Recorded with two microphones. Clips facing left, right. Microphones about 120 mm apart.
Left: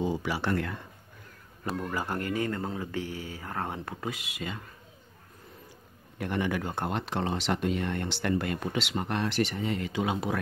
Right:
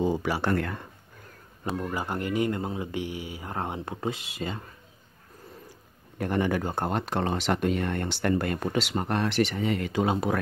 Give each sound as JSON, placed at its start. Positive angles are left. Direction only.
{"t": 0.0, "sound": "speech", "side_deg": -50}
{"t": 1.8, "sound": "speech", "side_deg": -15}
{"t": 6.1, "sound": "speech", "side_deg": -40}
{"t": 9.3, "sound": "speech", "side_deg": -85}